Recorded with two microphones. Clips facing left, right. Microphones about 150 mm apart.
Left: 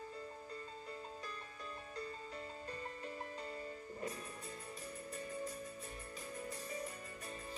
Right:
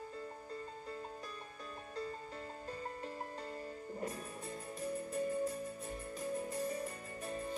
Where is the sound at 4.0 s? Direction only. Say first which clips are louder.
Right 2 dB; 45° right (ahead or behind).